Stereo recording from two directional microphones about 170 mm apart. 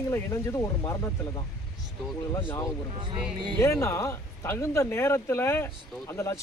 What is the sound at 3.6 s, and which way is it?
Speech, 15° left (ahead or behind).